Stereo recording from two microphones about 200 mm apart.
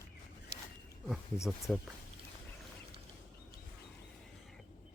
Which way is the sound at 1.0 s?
5° right (ahead or behind).